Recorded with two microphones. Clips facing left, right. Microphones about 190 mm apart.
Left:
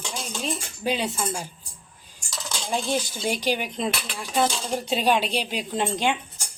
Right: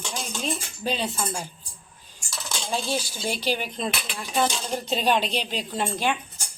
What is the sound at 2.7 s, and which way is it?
A woman's voice, 20° left (ahead or behind).